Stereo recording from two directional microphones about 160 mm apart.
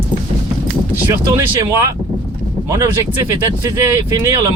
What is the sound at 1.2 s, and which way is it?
Speech, 20° right (ahead or behind).